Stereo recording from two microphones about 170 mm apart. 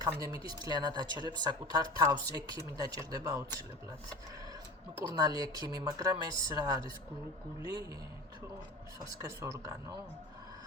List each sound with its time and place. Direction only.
0.0 s speech: 20° right (ahead or behind)
5.1 s speech: 25° right (ahead or behind)
9.1 s speech: 15° right (ahead or behind)